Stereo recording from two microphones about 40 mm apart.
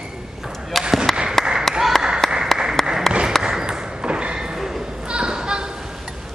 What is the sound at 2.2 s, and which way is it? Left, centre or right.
Applause, centre.